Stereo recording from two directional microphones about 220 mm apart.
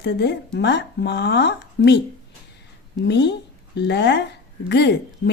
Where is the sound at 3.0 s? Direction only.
50° left (ahead or behind).